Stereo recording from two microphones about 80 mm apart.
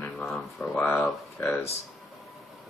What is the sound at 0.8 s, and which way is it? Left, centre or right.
Speech, centre.